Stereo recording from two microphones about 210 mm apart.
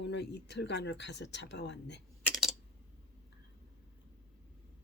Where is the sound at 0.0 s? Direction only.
55° left (ahead or behind).